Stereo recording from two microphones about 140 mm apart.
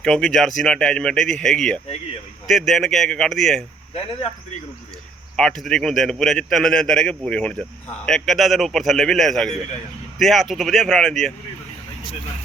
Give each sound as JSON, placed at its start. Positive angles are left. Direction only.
{"t": 0.0, "sound": "a man's voice", "side_deg": 5}
{"t": 3.9, "sound": "speech", "side_deg": 45}
{"t": 5.4, "sound": "a man's voice", "side_deg": 5}